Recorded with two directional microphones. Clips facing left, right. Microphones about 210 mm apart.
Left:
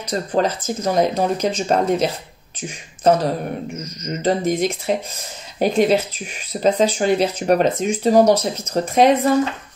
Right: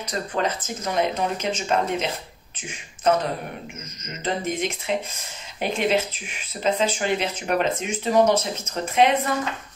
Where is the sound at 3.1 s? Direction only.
35° left (ahead or behind).